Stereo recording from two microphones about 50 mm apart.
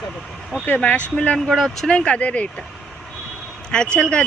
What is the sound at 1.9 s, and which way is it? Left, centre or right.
Speech, left.